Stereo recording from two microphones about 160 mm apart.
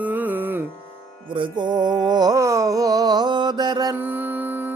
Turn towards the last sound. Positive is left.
turn(degrees=-25)  # may be behind; listen again after turning